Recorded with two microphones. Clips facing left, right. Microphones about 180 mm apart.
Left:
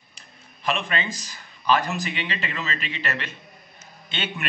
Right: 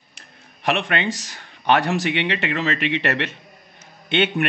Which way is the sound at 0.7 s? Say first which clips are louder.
Right 5 dB; 70° right (ahead or behind).